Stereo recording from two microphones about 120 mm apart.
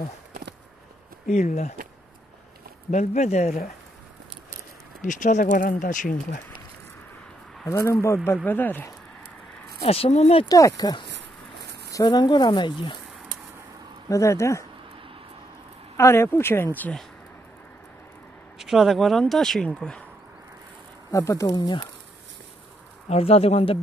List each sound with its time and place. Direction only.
1.2 s speech: 70° left (ahead or behind)
2.9 s speech: 80° left
5.0 s speech: 90° left
7.6 s speech: 25° left (ahead or behind)
9.8 s speech: 55° left (ahead or behind)
10.5 s speech: 30° left (ahead or behind)
14.0 s speech: 25° left (ahead or behind)
16.0 s speech: 20° left (ahead or behind)
18.6 s speech: 5° right (ahead or behind)
21.1 s speech: 25° left (ahead or behind)
23.0 s speech: 55° left (ahead or behind)